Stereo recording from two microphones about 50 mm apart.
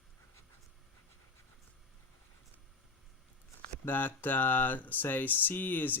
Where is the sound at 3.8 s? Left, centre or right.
Left.